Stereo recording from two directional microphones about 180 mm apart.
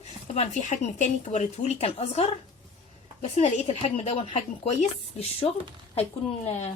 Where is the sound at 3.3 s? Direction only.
40° left (ahead or behind).